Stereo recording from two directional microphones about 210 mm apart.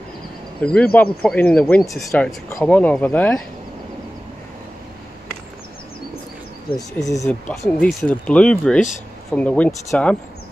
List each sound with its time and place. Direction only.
0.6 s speech: 5° left (ahead or behind)
7.2 s speech: 5° left (ahead or behind)